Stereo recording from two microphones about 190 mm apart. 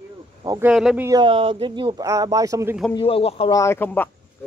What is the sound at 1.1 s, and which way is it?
Speech, 25° right (ahead or behind).